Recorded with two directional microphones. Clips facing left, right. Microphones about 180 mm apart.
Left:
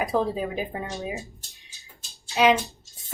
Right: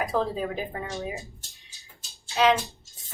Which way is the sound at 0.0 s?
15° left (ahead or behind).